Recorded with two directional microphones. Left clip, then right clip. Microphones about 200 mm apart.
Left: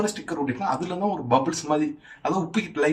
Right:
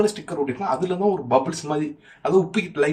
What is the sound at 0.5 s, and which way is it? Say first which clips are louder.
Speech: right 3 dB; 10° right (ahead or behind).